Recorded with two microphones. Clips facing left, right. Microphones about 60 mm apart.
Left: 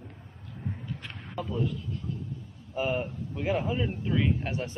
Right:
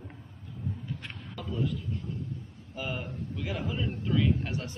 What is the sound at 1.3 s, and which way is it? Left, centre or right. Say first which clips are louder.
A man's voice: left 2 dB; centre.